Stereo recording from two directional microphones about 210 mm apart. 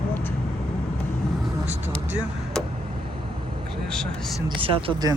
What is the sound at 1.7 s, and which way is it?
Vehicle, 10° right (ahead or behind).